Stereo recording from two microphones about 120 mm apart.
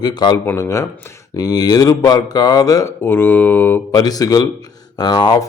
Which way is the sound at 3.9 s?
30° left (ahead or behind).